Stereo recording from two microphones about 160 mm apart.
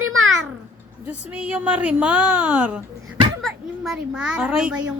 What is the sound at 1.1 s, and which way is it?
A woman's voice, 10° right (ahead or behind).